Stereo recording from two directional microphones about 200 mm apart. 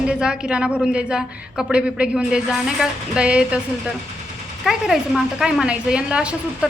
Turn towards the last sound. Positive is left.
turn(degrees=-5)  # may be behind; listen again after turning